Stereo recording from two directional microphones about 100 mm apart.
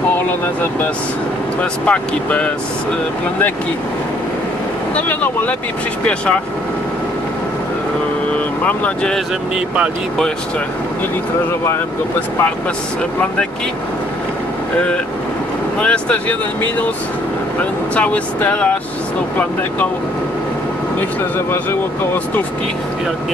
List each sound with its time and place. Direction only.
1.6 s speech: 10° left (ahead or behind)
4.9 s speech: 15° left (ahead or behind)
8.6 s speech: 15° left (ahead or behind)
15.8 s speech: 15° left (ahead or behind)
17.9 s speech: 15° left (ahead or behind)